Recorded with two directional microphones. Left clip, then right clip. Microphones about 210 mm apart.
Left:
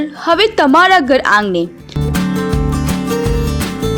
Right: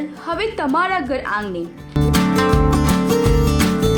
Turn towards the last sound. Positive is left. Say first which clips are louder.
# right 1 dB
turn(degrees=0)  # may be behind; listen again after turning